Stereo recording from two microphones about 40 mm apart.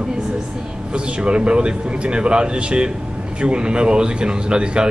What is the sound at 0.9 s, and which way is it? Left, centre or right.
Speech, right.